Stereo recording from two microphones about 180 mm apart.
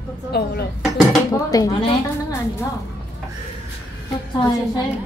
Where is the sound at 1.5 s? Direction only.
20° left (ahead or behind).